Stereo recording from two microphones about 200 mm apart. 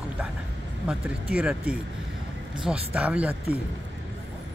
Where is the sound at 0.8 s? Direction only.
5° right (ahead or behind).